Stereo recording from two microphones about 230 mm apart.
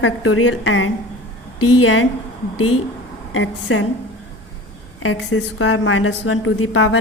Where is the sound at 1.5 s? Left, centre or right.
Left.